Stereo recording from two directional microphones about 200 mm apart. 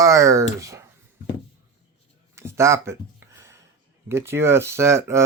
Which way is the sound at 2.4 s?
15° right (ahead or behind).